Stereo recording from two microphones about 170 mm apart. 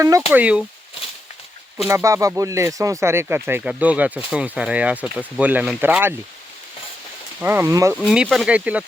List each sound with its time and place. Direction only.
0.3 s speech: 5° right (ahead or behind)
1.9 s speech: 15° right (ahead or behind)
7.3 s speech: 10° right (ahead or behind)
7.9 s speech: 5° right (ahead or behind)